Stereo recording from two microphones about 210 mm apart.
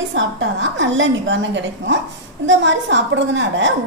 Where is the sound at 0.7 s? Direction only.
60° right (ahead or behind).